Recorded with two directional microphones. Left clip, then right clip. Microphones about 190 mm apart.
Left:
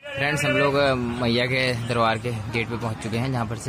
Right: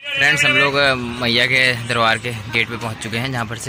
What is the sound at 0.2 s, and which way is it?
A man's voice, centre (ahead or behind).